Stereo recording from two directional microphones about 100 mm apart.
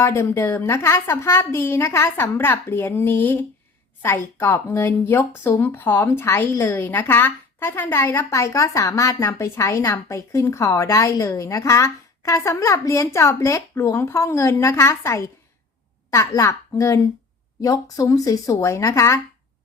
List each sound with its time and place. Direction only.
0.0 s a woman's voice: 25° left (ahead or behind)